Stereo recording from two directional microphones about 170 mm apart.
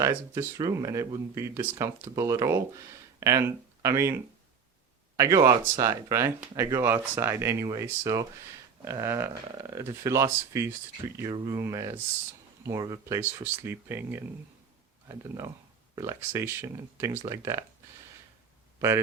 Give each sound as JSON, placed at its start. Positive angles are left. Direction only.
{"t": 0.0, "sound": "speech", "side_deg": -15}